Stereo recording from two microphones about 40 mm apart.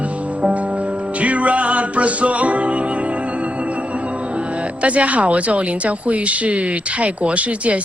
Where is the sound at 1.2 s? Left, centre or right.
Right.